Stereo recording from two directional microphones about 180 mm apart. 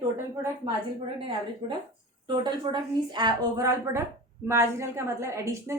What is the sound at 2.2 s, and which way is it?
A woman's voice, 25° right (ahead or behind).